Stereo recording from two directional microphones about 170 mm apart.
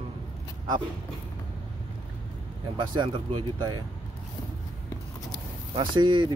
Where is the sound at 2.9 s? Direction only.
25° right (ahead or behind).